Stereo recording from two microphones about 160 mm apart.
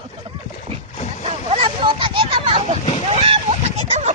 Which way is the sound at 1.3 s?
35° right (ahead or behind).